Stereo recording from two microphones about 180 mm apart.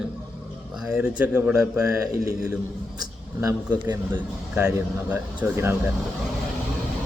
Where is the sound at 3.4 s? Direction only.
15° right (ahead or behind).